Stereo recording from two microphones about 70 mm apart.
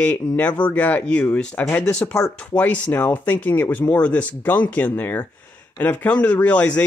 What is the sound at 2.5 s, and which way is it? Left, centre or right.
Speech, left.